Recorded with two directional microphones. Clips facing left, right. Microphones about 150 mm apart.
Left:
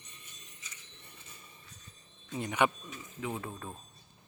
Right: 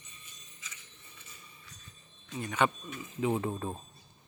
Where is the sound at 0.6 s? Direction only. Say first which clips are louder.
Right 3 dB; 90° right.